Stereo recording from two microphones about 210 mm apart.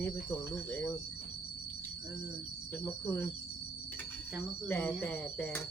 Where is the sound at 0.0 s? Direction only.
10° left (ahead or behind).